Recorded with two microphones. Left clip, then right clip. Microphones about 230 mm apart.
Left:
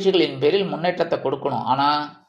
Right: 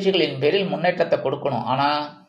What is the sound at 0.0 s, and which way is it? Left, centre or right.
Speech, left.